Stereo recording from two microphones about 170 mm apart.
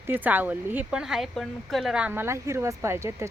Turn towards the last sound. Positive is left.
turn(degrees=-15)  # may be behind; listen again after turning